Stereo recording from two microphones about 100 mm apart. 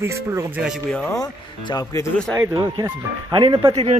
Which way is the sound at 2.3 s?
30° right (ahead or behind).